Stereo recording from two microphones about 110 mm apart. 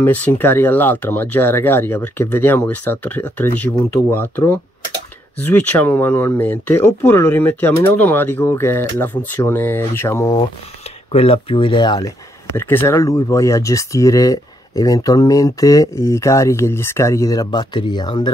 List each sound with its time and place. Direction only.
0.0 s speech: 15° left (ahead or behind)
11.1 s speech: 60° left (ahead or behind); by 12.1 s 40° left (ahead or behind)
12.5 s speech: 20° left (ahead or behind); by 18.3 s 40° left (ahead or behind)